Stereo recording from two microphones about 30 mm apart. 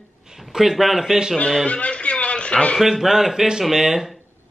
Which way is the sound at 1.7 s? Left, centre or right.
Left.